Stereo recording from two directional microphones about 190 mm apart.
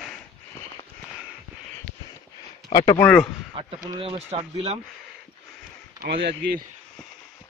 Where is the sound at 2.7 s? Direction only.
20° left (ahead or behind).